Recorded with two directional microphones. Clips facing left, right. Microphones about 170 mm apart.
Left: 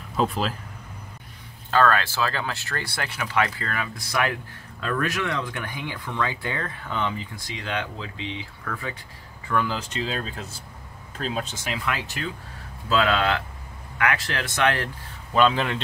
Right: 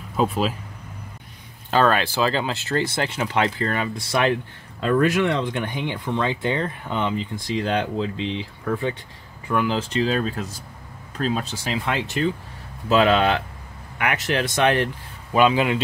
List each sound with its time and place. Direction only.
0.2 s speech: 5° right (ahead or behind)
1.7 s speech: 20° right (ahead or behind)
7.5 s speech: 35° right (ahead or behind)
9.5 s speech: 15° right (ahead or behind)
10.0 s speech: 45° right (ahead or behind)
11.2 s speech: 30° right (ahead or behind)
15.3 s speech: 10° right (ahead or behind)